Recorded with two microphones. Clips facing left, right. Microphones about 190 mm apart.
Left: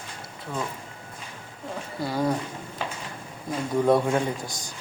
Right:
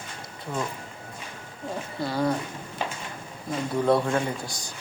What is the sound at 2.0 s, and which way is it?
Speech, 10° left (ahead or behind).